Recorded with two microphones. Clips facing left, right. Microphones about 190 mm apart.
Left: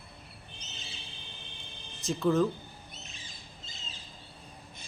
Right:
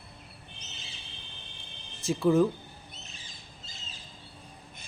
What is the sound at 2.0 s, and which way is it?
Speech, 10° right (ahead or behind).